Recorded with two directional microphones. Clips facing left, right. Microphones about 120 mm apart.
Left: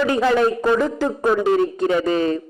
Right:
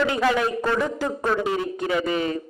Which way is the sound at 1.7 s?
30° left (ahead or behind).